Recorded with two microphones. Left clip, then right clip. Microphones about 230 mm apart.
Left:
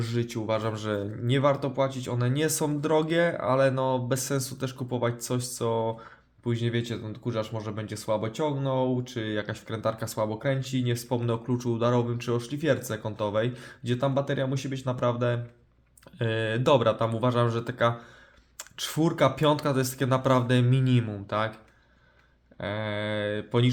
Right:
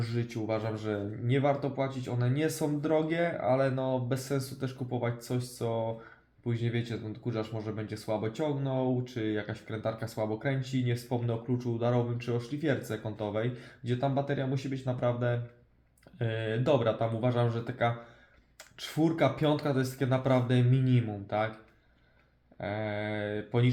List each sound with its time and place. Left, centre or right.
0.0 s speech: left
22.6 s speech: left